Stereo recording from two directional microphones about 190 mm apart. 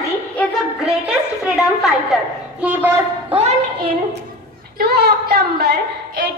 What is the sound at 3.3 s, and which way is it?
Speech, 35° right (ahead or behind).